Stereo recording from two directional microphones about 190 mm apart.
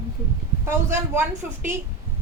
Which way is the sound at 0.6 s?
15° right (ahead or behind).